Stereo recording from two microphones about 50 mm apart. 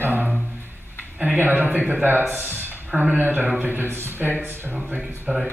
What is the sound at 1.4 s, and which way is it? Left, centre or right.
Speech, right.